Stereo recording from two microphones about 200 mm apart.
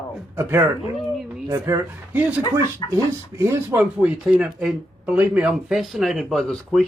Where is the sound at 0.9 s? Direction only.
Centre (ahead or behind).